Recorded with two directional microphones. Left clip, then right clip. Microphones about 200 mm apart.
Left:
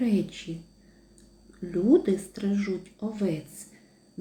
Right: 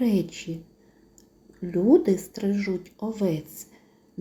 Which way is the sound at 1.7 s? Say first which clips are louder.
Right 3 dB; 15° right (ahead or behind).